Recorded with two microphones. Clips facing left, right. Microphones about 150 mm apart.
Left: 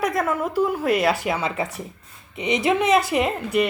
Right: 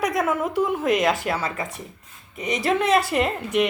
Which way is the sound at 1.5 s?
30° left (ahead or behind).